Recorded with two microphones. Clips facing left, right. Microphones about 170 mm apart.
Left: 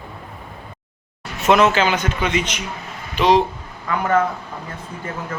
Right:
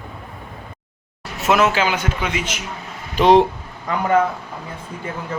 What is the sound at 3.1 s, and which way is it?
Speech, 50° right (ahead or behind).